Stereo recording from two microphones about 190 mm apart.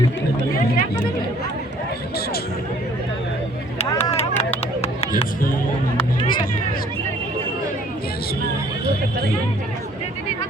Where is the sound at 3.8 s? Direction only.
35° left (ahead or behind).